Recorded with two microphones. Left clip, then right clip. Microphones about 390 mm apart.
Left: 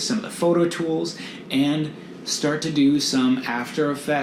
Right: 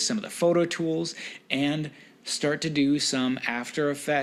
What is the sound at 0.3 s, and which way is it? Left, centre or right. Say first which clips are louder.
Speech: left 3 dB; right.